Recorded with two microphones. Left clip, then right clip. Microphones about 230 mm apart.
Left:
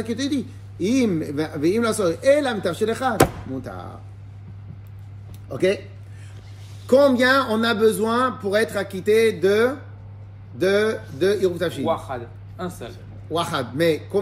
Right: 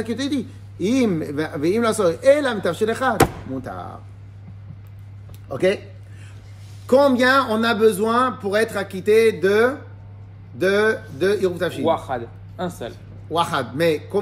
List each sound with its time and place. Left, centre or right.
0.0 s speech: centre
5.5 s speech: centre
6.9 s a man's voice: centre
11.8 s speech: right
13.3 s a man's voice: centre